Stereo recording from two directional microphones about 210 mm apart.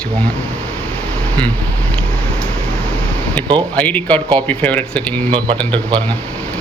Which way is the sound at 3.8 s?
5° left (ahead or behind).